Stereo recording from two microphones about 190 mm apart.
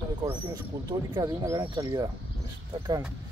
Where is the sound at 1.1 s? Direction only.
20° right (ahead or behind).